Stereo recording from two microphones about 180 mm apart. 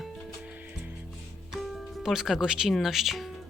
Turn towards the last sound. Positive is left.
turn(degrees=0)  # may be behind; listen again after turning